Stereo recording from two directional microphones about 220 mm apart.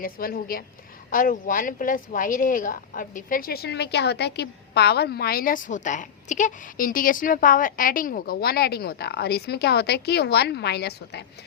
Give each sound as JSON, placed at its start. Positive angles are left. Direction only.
{"t": 0.0, "sound": "a woman's voice", "side_deg": 40}